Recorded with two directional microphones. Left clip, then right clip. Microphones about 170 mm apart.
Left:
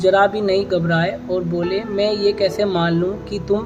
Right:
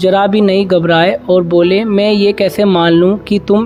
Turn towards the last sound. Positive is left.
turn(degrees=-50)  # may be behind; listen again after turning